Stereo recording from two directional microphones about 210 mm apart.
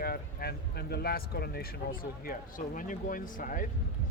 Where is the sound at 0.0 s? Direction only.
45° left (ahead or behind).